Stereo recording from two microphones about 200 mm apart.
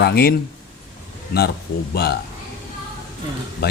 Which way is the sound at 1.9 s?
50° left (ahead or behind).